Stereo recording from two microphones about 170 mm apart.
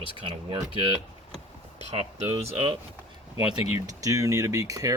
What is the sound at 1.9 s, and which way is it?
Speech, 35° right (ahead or behind).